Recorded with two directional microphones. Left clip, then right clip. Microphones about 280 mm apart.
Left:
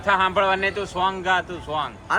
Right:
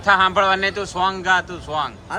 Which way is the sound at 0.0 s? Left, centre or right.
Centre.